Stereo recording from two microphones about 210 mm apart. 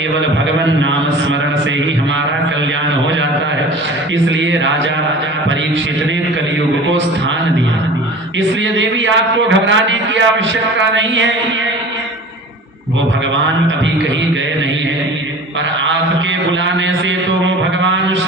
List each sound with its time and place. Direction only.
0.6 s a man's voice: 65° right (ahead or behind)
4.3 s a man's voice: 60° right (ahead or behind)
8.4 s a man's voice: 60° right (ahead or behind)
16.5 s a man's voice: 65° right (ahead or behind)
17.4 s mantra: 65° right (ahead or behind)